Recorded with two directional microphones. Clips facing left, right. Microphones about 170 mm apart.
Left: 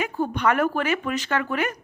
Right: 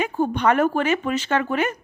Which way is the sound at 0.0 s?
30° right (ahead or behind).